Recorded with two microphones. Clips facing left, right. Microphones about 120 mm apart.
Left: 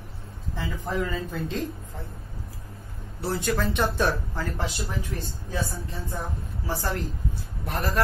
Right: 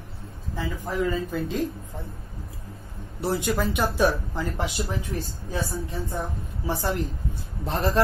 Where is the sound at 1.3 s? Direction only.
Centre (ahead or behind).